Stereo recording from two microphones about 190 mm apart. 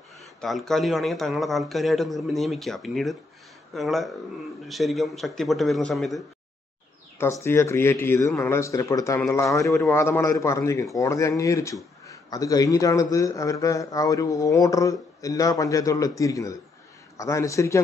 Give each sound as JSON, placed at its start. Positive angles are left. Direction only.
{"t": 0.4, "sound": "a man's voice", "side_deg": 0}
{"t": 7.2, "sound": "a man's voice", "side_deg": 15}